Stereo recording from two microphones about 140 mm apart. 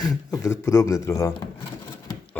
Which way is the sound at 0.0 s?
25° left (ahead or behind).